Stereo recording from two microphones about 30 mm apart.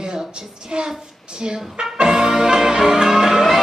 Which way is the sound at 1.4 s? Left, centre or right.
Right.